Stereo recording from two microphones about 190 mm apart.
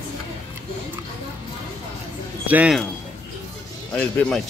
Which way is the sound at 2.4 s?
5° right (ahead or behind).